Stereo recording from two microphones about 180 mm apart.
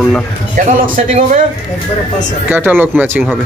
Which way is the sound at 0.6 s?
45° right (ahead or behind).